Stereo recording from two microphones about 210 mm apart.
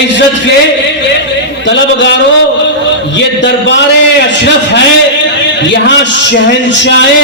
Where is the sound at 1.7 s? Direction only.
60° left (ahead or behind).